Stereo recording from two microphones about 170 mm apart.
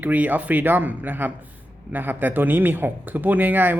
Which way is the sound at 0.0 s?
10° right (ahead or behind).